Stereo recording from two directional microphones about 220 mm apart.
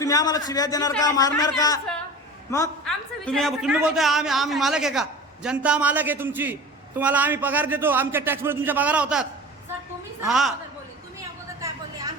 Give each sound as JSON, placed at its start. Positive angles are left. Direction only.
{"t": 0.0, "sound": "a man's voice", "side_deg": 15}
{"t": 2.8, "sound": "a woman's voice", "side_deg": 0}